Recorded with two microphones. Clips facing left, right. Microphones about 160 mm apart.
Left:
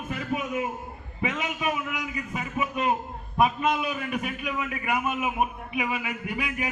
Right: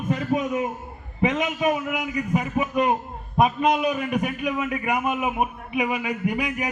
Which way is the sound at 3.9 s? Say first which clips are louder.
Right 5 dB; 35° right (ahead or behind).